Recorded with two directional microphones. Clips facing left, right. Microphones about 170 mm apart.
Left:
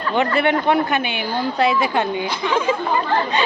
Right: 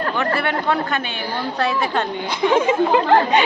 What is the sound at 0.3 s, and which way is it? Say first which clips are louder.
A woman's voice: left 4 dB; 15° left (ahead or behind).